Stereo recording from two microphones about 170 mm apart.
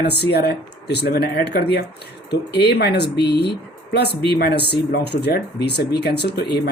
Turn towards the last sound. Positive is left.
turn(degrees=75)  # may be behind; listen again after turning